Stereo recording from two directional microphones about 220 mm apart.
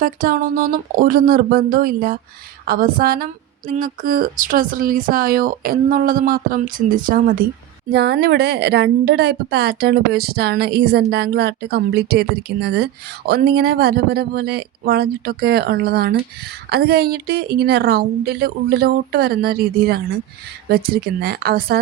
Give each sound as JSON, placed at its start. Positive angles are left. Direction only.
{"t": 0.0, "sound": "a woman's voice", "side_deg": -40}